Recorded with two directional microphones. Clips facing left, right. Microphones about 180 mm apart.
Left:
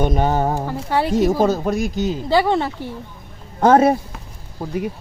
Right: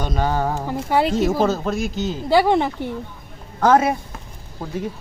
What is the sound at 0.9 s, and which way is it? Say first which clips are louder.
Speech: right 2 dB; 15° right (ahead or behind).